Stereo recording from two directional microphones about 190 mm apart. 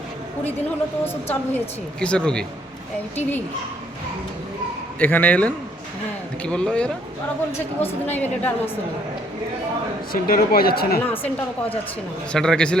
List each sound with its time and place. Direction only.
1.0 s a woman's voice: 10° left (ahead or behind)
4.9 s a woman's voice: 10° left (ahead or behind)
10.1 s speech: 50° left (ahead or behind)
12.3 s a woman's voice: 5° left (ahead or behind)